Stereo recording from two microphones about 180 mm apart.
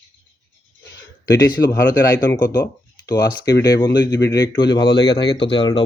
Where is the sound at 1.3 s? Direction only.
20° left (ahead or behind).